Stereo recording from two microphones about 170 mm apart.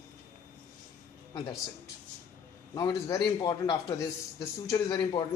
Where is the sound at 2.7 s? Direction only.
20° left (ahead or behind).